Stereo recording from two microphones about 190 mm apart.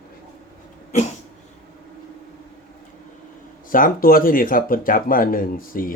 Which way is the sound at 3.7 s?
45° left (ahead or behind).